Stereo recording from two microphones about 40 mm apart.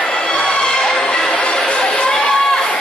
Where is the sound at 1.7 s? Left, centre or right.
Left.